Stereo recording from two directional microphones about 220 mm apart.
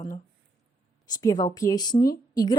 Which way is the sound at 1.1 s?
15° left (ahead or behind).